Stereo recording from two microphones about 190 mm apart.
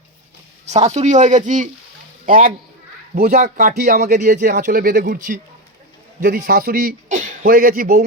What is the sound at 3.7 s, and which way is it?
A man's voice, 55° right (ahead or behind).